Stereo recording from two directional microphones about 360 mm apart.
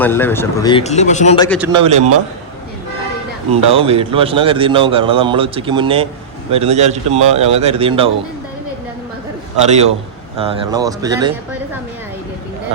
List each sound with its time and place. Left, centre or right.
0.0 s speech: centre
1.5 s a man's voice: centre
3.5 s a man's voice: centre
10.3 s a man's voice: centre